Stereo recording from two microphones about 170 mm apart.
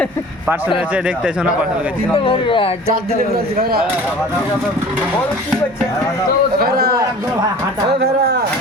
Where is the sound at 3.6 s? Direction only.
65° right (ahead or behind).